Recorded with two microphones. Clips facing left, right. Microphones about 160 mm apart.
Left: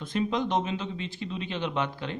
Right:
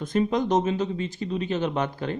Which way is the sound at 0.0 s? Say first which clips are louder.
Right 4 dB; 45° right (ahead or behind).